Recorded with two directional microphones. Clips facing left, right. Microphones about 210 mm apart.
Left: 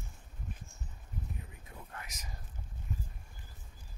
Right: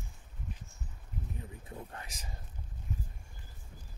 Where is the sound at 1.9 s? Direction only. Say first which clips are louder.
Right 1 dB; 30° right (ahead or behind).